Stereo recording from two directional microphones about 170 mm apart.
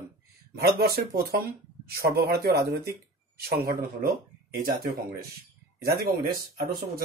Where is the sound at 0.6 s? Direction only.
65° right (ahead or behind).